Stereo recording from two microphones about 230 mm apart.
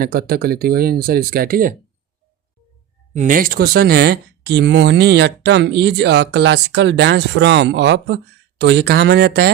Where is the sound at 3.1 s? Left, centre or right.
Right.